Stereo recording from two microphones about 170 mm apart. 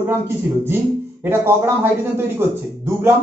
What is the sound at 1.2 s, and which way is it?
Speech, 15° right (ahead or behind).